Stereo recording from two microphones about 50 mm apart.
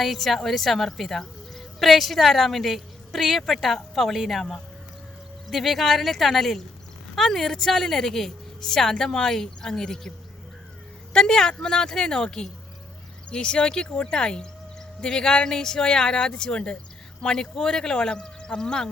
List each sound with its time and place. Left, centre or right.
0.0 s a woman's voice: centre
11.1 s a woman's voice: centre